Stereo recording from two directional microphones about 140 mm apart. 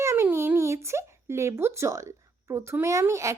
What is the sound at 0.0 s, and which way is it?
Speech, 20° right (ahead or behind).